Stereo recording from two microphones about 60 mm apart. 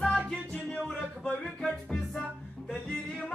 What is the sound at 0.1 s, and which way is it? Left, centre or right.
Music, centre.